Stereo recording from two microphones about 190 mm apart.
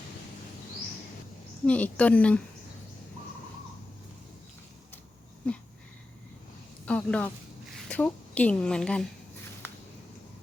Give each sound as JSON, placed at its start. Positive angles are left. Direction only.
{"t": 1.6, "sound": "a woman's voice", "side_deg": 5}
{"t": 6.8, "sound": "a sound", "side_deg": 5}
{"t": 7.9, "sound": "a woman's voice", "side_deg": 10}